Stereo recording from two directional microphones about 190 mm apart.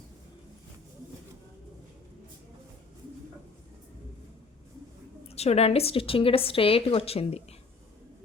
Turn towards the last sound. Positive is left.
turn(degrees=30)  # may be behind; listen again after turning